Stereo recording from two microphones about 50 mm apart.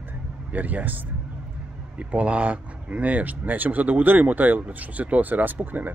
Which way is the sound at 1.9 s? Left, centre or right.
Right.